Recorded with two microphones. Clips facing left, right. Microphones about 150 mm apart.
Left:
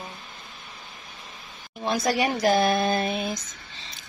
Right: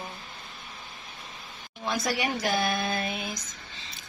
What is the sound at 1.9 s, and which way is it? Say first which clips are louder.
Speech: left 5 dB; 35° left (ahead or behind).